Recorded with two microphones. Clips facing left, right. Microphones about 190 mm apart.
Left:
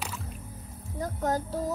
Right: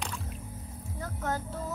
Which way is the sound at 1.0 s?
35° left (ahead or behind).